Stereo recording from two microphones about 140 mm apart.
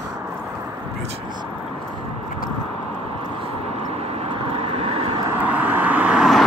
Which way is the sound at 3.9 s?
45° right (ahead or behind).